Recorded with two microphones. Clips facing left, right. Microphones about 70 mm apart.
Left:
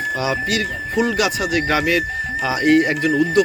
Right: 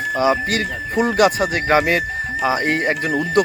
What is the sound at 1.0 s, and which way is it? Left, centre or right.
Speech, right.